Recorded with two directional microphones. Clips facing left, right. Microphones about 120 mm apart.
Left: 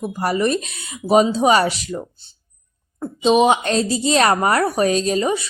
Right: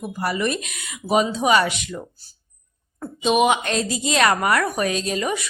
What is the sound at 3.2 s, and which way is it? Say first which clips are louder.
Speech: left 4 dB; 30° left (ahead or behind).